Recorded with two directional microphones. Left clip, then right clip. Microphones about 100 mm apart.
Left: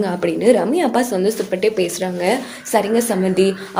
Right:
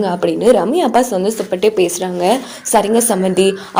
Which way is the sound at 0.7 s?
40° right (ahead or behind).